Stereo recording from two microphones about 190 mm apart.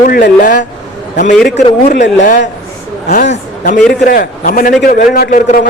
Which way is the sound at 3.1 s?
40° left (ahead or behind).